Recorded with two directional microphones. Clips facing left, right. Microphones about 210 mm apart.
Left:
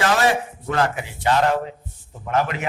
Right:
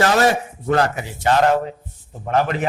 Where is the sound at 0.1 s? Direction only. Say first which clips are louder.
Right 3 dB; 40° right (ahead or behind).